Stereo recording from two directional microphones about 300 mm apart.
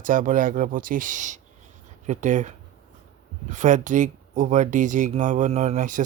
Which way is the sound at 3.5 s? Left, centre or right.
Right.